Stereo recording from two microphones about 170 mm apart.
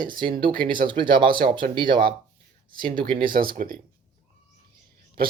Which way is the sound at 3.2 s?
55° right (ahead or behind).